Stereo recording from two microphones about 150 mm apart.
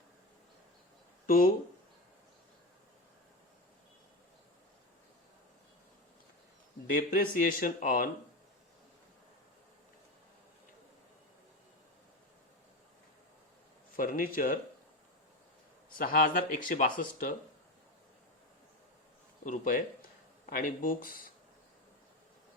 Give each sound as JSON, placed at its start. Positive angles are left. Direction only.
{"t": 1.3, "sound": "speech", "side_deg": 65}
{"t": 6.9, "sound": "speech", "side_deg": 70}
{"t": 13.9, "sound": "speech", "side_deg": 70}
{"t": 16.0, "sound": "speech", "side_deg": 70}
{"t": 19.5, "sound": "speech", "side_deg": 65}